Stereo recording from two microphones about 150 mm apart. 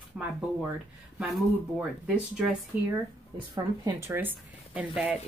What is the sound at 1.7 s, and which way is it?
Speech, 10° right (ahead or behind).